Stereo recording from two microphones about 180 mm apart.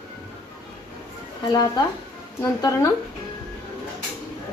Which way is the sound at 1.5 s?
20° left (ahead or behind).